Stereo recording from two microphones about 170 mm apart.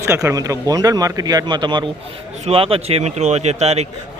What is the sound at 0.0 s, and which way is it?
A man's voice, 15° right (ahead or behind).